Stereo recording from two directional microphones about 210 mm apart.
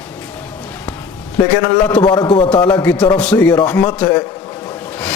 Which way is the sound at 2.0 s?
20° left (ahead or behind).